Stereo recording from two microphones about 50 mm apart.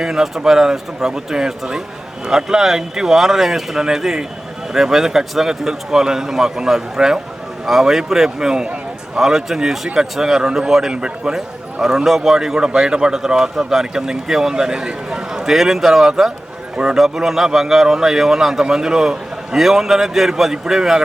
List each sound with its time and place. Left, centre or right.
0.0 s a man's voice: centre
9.1 s a man's voice: centre